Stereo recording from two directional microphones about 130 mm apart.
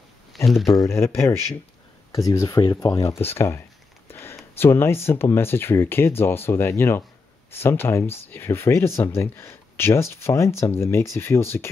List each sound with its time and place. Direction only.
0.7 s speech: 20° left (ahead or behind)
2.1 s speech: 25° left (ahead or behind)
4.1 s a sound: 20° left (ahead or behind)
4.6 s speech: 20° left (ahead or behind)